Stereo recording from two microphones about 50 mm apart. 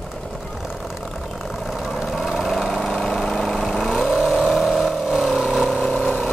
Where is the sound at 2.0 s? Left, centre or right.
Centre.